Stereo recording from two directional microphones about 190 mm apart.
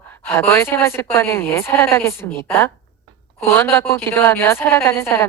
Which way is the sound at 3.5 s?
10° left (ahead or behind).